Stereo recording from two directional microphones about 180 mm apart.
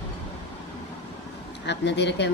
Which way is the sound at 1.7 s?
75° left (ahead or behind).